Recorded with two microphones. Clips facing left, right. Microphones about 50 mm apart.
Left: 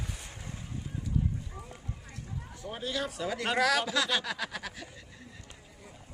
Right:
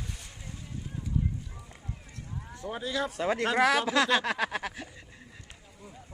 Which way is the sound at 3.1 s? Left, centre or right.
Right.